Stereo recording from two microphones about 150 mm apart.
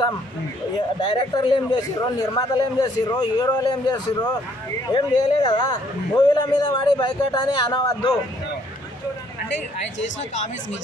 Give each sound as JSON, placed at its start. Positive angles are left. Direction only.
{"t": 1.3, "sound": "a man's voice", "side_deg": 25}